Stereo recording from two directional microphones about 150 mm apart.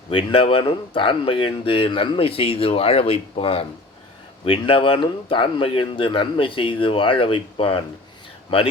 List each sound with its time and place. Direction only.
0.1 s speech: 35° left (ahead or behind)